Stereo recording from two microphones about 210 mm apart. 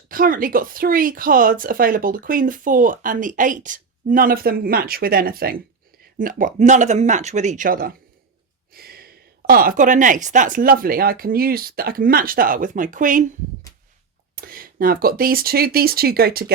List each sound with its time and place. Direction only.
0.1 s a woman's voice: 40° right (ahead or behind)
14.3 s speech: 45° right (ahead or behind)